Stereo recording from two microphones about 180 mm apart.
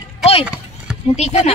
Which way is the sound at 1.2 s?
35° left (ahead or behind).